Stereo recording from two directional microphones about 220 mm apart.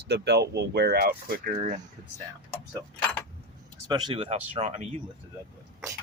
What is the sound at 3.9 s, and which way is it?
Speech, 20° right (ahead or behind).